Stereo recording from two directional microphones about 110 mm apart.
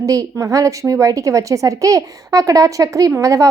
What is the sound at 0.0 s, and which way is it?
A woman's voice, 30° right (ahead or behind).